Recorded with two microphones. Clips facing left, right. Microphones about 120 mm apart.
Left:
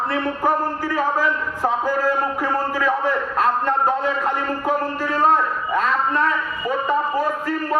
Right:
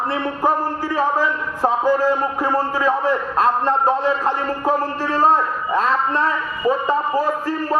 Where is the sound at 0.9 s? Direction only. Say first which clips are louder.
Right 2 dB; 30° right (ahead or behind).